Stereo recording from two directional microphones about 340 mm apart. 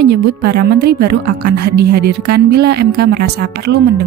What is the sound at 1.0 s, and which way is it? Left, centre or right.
Speech, right.